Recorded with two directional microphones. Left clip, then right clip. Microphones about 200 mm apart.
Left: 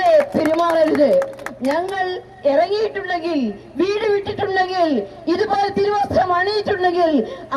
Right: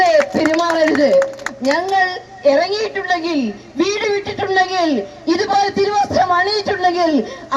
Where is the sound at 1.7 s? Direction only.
30° right (ahead or behind).